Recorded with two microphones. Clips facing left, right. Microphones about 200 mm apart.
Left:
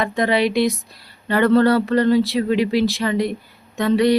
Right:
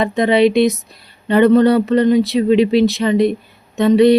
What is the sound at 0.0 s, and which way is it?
Speech, 20° right (ahead or behind).